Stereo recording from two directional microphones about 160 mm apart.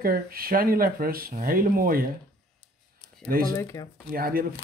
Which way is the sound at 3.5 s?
20° left (ahead or behind).